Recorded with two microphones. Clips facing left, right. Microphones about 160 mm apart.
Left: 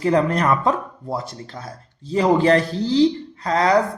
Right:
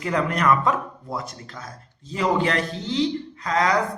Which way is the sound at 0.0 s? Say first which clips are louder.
Left 5 dB; 35° left (ahead or behind).